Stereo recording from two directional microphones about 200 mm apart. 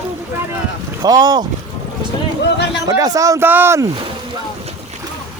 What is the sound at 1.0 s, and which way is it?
Speech, 20° right (ahead or behind).